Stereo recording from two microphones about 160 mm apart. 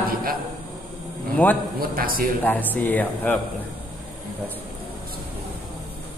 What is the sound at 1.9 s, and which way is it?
Speech, 65° right (ahead or behind).